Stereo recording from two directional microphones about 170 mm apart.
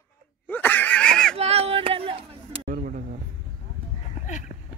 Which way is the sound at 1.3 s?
35° right (ahead or behind).